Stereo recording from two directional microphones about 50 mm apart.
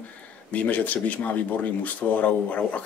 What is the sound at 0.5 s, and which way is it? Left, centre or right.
Speech, left.